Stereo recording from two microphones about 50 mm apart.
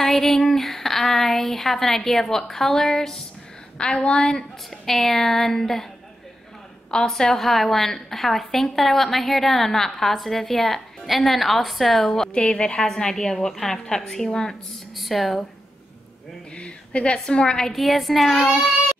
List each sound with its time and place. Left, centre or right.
0.0 s speech: centre
3.7 s a woman's voice: left
4.8 s a woman's voice: centre
6.9 s a woman's voice: centre
12.4 s speech: centre
15.0 s speech: centre
16.5 s a woman's voice: centre